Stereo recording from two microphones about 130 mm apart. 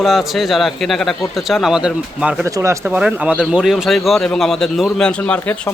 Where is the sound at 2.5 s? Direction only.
25° right (ahead or behind).